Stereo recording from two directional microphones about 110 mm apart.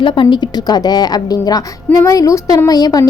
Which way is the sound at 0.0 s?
45° left (ahead or behind).